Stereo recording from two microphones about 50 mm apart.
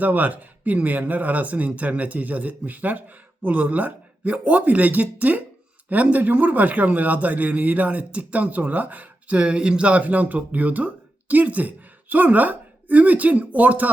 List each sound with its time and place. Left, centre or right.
0.0 s speech: right